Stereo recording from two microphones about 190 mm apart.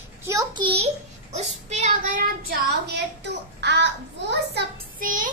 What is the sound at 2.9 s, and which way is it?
Speech, 65° right (ahead or behind).